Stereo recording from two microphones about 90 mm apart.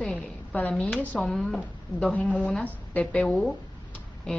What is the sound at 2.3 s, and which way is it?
A woman's voice, 15° left (ahead or behind).